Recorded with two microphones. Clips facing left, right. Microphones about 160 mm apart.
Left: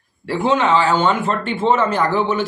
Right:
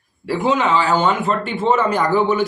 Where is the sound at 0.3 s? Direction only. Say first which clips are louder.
Left 1 dB; 10° right (ahead or behind).